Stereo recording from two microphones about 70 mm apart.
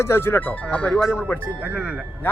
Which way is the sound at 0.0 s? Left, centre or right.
Left.